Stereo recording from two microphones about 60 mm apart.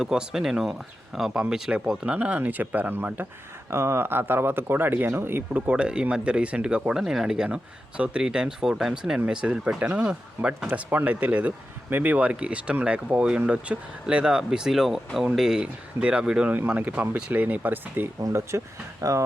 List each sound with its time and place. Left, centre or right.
0.0 s speech: centre
1.3 s speech: centre
2.0 s speech: right
3.7 s speech: right
5.5 s speech: right
16.6 s speech: right
18.2 s speech: right
19.0 s speech: right